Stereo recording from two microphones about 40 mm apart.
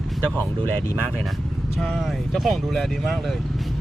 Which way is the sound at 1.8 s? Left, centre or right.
Centre.